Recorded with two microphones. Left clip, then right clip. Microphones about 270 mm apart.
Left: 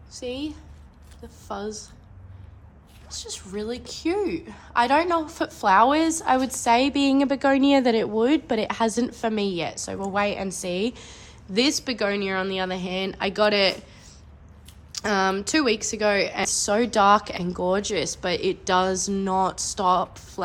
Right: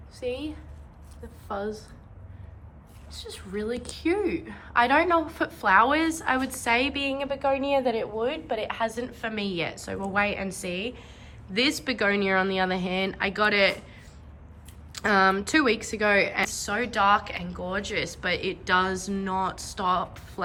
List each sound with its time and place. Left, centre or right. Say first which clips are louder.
0.1 s a woman's voice: even; centre
3.1 s a woman's voice: left 3 dB; centre
11.5 s a woman's voice: left 2 dB; centre
14.9 s a woman's voice: right 2 dB; centre